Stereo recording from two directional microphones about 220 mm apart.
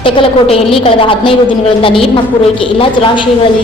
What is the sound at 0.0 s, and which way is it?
A woman's voice, 25° left (ahead or behind).